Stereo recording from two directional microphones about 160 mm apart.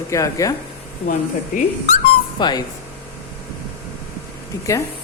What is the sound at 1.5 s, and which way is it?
Speech, 55° left (ahead or behind).